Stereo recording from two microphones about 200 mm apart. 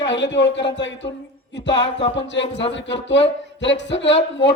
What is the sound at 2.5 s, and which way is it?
A man's voice, 65° left (ahead or behind).